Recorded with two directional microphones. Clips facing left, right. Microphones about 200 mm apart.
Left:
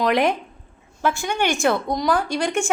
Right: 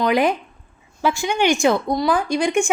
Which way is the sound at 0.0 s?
5° right (ahead or behind).